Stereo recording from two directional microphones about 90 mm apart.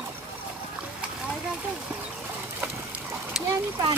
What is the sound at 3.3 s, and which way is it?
Splash, 5° right (ahead or behind).